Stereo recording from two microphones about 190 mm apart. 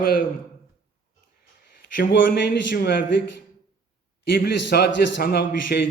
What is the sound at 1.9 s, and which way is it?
A man's voice, 60° left (ahead or behind).